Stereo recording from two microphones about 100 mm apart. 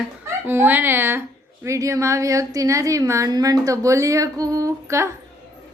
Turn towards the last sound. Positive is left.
turn(degrees=-30)  # may be behind; listen again after turning